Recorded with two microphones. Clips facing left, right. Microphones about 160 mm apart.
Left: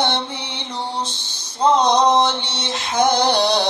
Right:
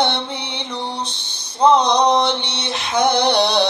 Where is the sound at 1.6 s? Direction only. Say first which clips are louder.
Right 1 dB; 60° right (ahead or behind).